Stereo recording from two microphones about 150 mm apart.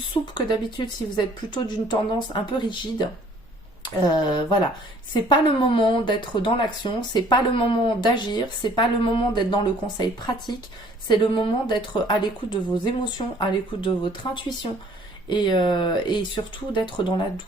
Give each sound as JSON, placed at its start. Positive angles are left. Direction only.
{"t": 0.1, "sound": "speech", "side_deg": 30}